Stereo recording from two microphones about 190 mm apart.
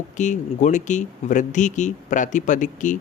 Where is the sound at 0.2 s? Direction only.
40° left (ahead or behind).